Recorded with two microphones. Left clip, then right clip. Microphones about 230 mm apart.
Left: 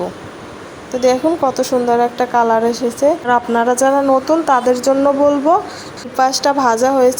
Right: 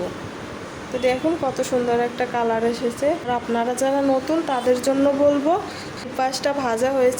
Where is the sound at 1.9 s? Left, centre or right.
Left.